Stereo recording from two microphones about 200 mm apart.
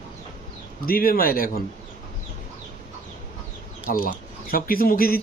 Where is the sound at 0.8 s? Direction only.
45° left (ahead or behind).